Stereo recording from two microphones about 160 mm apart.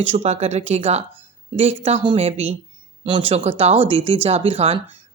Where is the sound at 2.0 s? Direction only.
30° right (ahead or behind).